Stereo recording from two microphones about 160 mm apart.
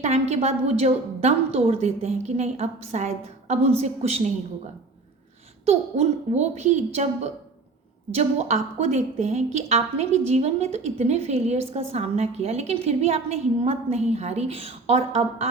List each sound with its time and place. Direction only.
0.0 s a woman's voice: 45° right (ahead or behind)
5.6 s a woman's voice: 45° right (ahead or behind)